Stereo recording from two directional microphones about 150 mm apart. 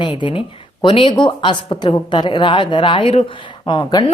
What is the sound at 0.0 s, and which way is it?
A woman's voice, 30° left (ahead or behind).